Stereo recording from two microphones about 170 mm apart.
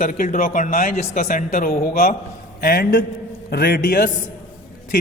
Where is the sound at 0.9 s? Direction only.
40° left (ahead or behind).